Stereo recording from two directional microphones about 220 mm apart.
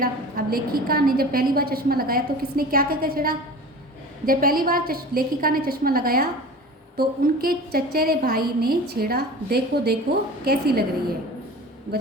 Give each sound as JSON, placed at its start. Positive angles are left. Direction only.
{"t": 0.0, "sound": "a woman's voice", "side_deg": -40}